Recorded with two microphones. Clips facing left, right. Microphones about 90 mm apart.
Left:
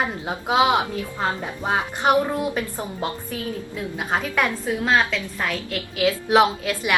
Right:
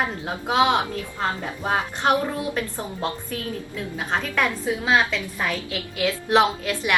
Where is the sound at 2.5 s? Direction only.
15° left (ahead or behind).